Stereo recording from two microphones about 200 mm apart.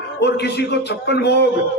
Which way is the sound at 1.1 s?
55° left (ahead or behind).